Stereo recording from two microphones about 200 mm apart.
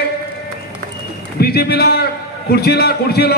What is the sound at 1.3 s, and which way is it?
A man's voice, 50° left (ahead or behind).